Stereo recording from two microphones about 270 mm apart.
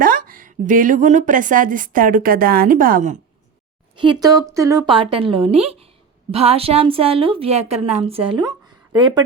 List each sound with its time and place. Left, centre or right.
0.0 s a woman's voice: right
4.2 s a woman's voice: centre